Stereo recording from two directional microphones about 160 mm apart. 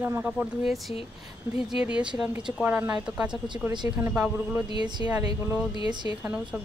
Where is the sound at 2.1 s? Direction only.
5° right (ahead or behind).